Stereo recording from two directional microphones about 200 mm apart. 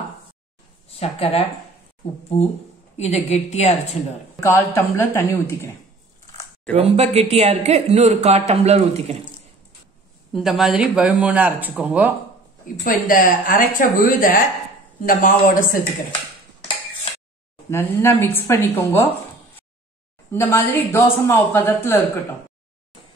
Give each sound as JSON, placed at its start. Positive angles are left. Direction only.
{"t": 0.8, "sound": "a woman's voice", "side_deg": 30}
{"t": 3.0, "sound": "a woman's voice", "side_deg": 35}
{"t": 4.4, "sound": "speech", "side_deg": 10}
{"t": 6.3, "sound": "a sound", "side_deg": 10}
{"t": 6.8, "sound": "a man's voice", "side_deg": -30}
{"t": 10.3, "sound": "speech", "side_deg": 0}
{"t": 12.8, "sound": "a woman's voice", "side_deg": 45}
{"t": 17.6, "sound": "speech", "side_deg": 10}
{"t": 20.2, "sound": "speech", "side_deg": 10}